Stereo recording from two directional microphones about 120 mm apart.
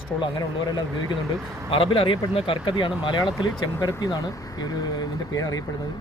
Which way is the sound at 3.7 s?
30° left (ahead or behind).